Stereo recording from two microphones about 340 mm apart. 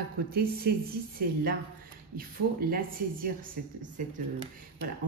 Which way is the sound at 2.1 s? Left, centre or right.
Right.